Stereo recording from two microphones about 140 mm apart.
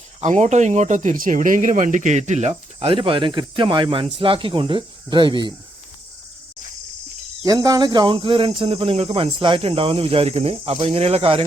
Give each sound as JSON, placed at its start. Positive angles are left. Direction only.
{"t": 0.2, "sound": "speech", "side_deg": -55}
{"t": 7.4, "sound": "speech", "side_deg": -25}